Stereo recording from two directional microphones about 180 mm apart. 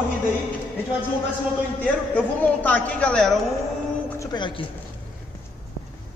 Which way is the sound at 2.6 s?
10° left (ahead or behind).